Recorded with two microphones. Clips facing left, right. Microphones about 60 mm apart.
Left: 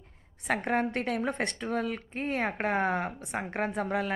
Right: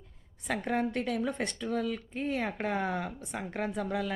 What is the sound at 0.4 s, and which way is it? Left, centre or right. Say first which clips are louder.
A woman's voice: left 3 dB; left.